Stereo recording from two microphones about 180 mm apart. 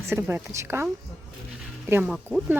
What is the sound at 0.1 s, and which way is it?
Speech, 15° right (ahead or behind).